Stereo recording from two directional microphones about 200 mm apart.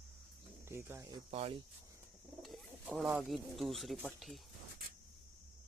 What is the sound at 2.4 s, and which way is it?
Speech, centre (ahead or behind).